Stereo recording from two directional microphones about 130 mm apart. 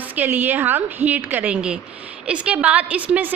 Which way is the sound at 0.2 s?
15° right (ahead or behind).